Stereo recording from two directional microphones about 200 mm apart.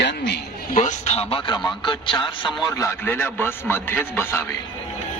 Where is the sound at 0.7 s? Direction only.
35° left (ahead or behind).